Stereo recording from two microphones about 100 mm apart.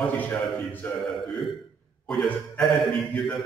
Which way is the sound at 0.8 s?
15° left (ahead or behind).